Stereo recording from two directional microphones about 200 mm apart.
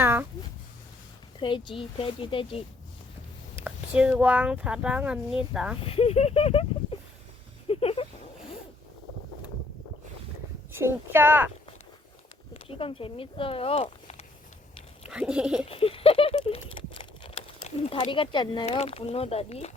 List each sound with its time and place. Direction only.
0.0 s a sound: 10° right (ahead or behind)
1.4 s speech: 25° left (ahead or behind)
3.6 s speech: 5° right (ahead or behind)
5.8 s speech: 30° left (ahead or behind)
7.7 s a sound: 30° left (ahead or behind)
10.7 s speech: 10° right (ahead or behind)
12.5 s speech: 30° left (ahead or behind)
15.1 s speech: 5° right (ahead or behind)
15.6 s patter: 30° left (ahead or behind)
17.8 s speech: 25° left (ahead or behind)